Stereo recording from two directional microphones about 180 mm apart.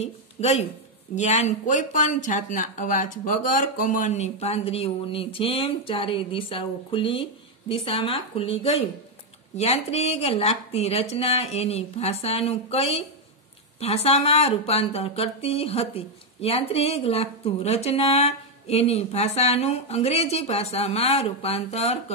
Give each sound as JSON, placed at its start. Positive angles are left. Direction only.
{"t": 0.0, "sound": "speech", "side_deg": 40}